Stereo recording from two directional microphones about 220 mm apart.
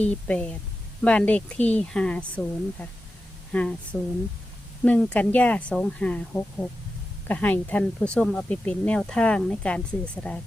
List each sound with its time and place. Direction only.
0.0 s speech: 5° left (ahead or behind)